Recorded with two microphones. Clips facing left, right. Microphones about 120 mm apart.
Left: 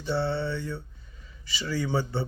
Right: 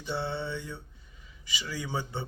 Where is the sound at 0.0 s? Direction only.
15° right (ahead or behind).